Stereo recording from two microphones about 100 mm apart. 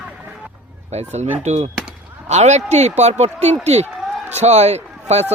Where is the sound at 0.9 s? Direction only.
90° right.